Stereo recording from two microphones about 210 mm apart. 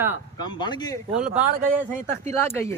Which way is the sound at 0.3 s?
20° left (ahead or behind).